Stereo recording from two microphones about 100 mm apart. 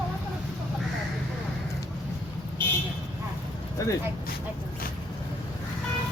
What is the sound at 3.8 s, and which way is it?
Speech, 35° left (ahead or behind).